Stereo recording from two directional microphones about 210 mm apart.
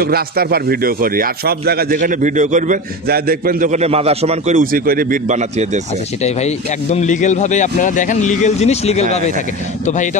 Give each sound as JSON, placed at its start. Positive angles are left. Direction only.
{"t": 0.0, "sound": "a man's voice", "side_deg": -45}
{"t": 6.2, "sound": "speech", "side_deg": 30}